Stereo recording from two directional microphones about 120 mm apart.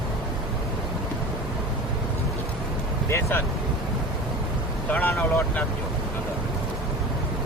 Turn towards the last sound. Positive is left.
turn(degrees=15)  # may be behind; listen again after turning